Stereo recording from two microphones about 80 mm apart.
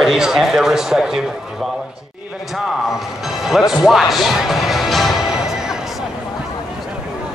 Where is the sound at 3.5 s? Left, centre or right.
Centre.